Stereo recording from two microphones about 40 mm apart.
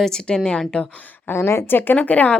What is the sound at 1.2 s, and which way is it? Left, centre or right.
Speech, left.